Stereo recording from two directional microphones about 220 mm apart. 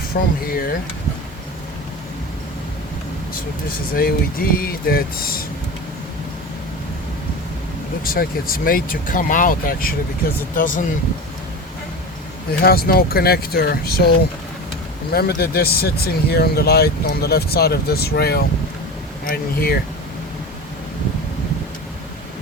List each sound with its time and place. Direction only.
0.1 s speech: 45° left (ahead or behind)
3.9 s speech: 40° left (ahead or behind)
8.0 s speech: 40° left (ahead or behind)
12.6 s speech: 45° left (ahead or behind)
15.1 s speech: 45° left (ahead or behind)